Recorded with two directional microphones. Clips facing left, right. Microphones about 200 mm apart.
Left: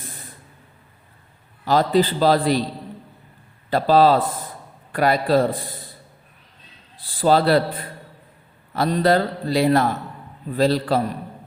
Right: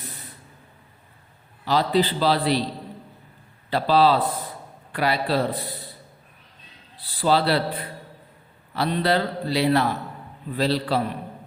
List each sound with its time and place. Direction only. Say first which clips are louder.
0.0 s a sound: left 1 dB; 45° left (ahead or behind)
1.6 s a man's voice: left 3 dB; 45° left (ahead or behind)
3.7 s a man's voice: left 3 dB; 45° left (ahead or behind)
6.9 s a man's voice: left 4 dB; 45° left (ahead or behind)